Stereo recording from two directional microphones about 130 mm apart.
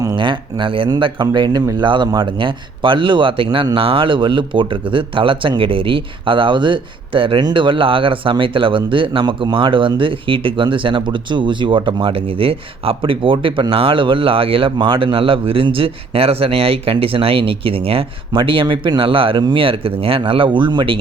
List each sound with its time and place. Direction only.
0.0 s speech: 35° right (ahead or behind)